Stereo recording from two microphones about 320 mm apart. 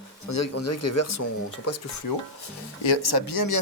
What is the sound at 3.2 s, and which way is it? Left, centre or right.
Speech, left.